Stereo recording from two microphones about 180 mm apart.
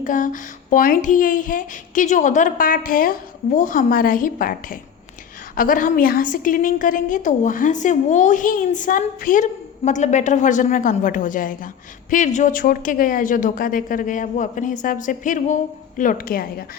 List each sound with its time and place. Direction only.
0.0 s a woman's voice: 45° left (ahead or behind)